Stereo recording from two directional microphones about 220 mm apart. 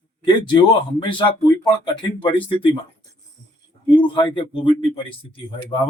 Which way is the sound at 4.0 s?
20° left (ahead or behind).